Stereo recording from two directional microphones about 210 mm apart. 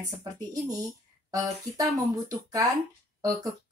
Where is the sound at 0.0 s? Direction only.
15° right (ahead or behind).